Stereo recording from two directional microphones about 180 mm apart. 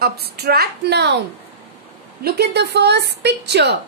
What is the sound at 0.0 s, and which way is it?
A woman's voice, 60° right (ahead or behind).